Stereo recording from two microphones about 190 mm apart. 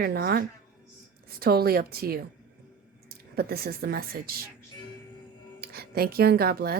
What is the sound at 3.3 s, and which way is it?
A woman's voice, 55° right (ahead or behind).